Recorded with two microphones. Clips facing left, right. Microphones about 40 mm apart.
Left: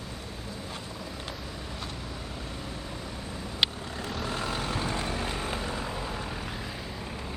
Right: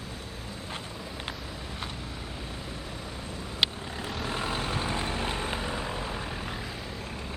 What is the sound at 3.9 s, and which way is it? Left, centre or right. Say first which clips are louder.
Vehicle: even; centre.